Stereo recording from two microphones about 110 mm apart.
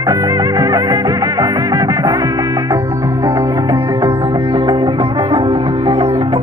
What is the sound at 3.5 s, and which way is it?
Music, 45° right (ahead or behind).